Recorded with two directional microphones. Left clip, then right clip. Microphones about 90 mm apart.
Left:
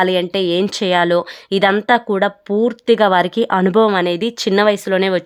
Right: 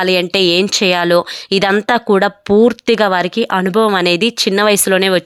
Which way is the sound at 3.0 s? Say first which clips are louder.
Even; 5° right (ahead or behind).